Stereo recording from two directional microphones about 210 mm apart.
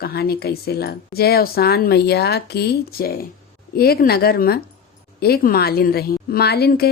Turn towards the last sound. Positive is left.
turn(degrees=50)  # may be behind; listen again after turning